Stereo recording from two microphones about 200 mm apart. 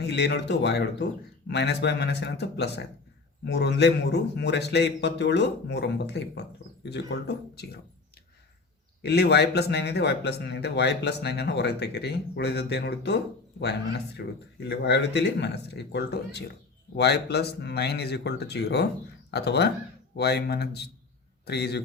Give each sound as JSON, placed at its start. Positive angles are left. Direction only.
{"t": 0.0, "sound": "speech", "side_deg": 55}
{"t": 9.0, "sound": "speech", "side_deg": 55}